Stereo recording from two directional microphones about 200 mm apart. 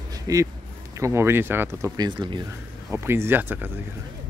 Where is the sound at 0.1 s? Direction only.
15° right (ahead or behind).